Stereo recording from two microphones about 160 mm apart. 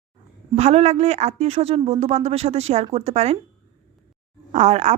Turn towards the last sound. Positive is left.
turn(degrees=-45)  # may be behind; listen again after turning